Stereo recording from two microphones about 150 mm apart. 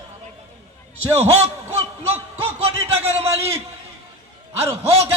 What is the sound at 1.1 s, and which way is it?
Speech, 45° right (ahead or behind).